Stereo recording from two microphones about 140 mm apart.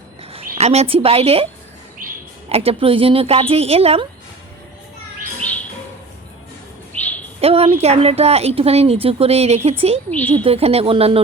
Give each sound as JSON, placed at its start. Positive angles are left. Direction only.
{"t": 0.2, "sound": "a sound", "side_deg": -45}
{"t": 0.6, "sound": "a woman's voice", "side_deg": -50}
{"t": 2.0, "sound": "chirp", "side_deg": -85}
{"t": 2.5, "sound": "a woman's voice", "side_deg": -45}
{"t": 6.9, "sound": "bird", "side_deg": 10}
{"t": 7.4, "sound": "a woman's voice", "side_deg": -45}
{"t": 10.1, "sound": "a woman's voice", "side_deg": 10}
{"t": 10.3, "sound": "a woman's voice", "side_deg": -45}